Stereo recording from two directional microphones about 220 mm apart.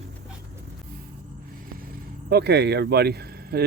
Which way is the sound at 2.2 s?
50° right (ahead or behind).